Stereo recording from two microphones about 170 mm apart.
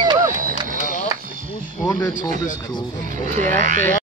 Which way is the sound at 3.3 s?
50° right (ahead or behind).